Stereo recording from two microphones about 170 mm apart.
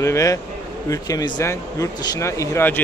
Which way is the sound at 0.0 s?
20° left (ahead or behind).